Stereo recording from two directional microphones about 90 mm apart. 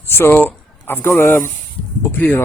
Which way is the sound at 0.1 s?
25° left (ahead or behind).